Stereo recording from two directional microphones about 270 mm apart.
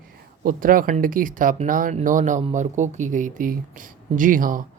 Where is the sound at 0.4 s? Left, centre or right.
Right.